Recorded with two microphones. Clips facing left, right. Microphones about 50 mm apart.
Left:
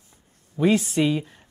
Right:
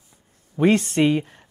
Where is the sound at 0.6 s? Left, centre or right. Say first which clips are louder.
Right 2 dB; right.